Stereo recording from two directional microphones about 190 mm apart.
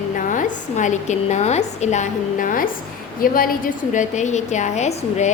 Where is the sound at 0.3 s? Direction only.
40° left (ahead or behind).